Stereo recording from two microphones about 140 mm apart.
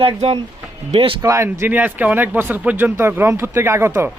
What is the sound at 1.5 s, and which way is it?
Speech, 15° right (ahead or behind).